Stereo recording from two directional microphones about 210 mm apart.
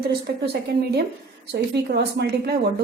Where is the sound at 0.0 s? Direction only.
50° right (ahead or behind).